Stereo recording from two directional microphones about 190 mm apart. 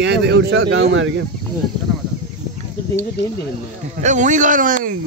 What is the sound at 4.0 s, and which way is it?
Speech, 40° right (ahead or behind).